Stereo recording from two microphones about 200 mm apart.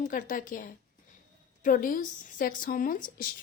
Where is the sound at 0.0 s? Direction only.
40° left (ahead or behind).